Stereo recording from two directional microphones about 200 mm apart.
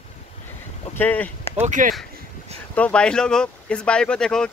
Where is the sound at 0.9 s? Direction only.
10° left (ahead or behind).